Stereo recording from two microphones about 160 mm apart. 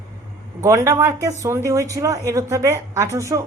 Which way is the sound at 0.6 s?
20° right (ahead or behind).